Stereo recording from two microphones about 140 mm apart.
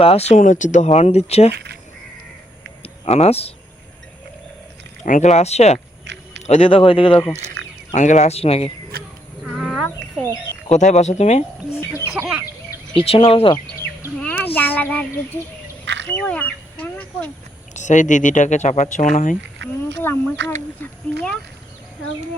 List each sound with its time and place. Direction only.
0.0 s speech: 45° left (ahead or behind)
2.8 s speech: 45° left (ahead or behind)
5.0 s speech: 65° left (ahead or behind); by 7.3 s 40° left (ahead or behind)
7.9 s speech: 60° left (ahead or behind)
8.9 s a sound: 90° right
9.4 s a sound: centre (ahead or behind)
10.7 s speech: 55° left (ahead or behind)
12.1 s speech: 5° right (ahead or behind)
12.9 s speech: 40° left (ahead or behind)
14.2 s a sound: 10° left (ahead or behind)
16.0 s speech: 10° left (ahead or behind)
17.7 s speech: 60° left (ahead or behind)
20.0 s speech: 15° left (ahead or behind)